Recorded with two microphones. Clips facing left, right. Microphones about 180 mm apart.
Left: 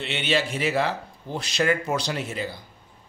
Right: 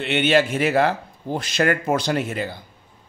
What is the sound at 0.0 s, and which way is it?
Speech, 55° right (ahead or behind).